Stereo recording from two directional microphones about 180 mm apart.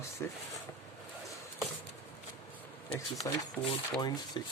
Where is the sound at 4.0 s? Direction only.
25° left (ahead or behind).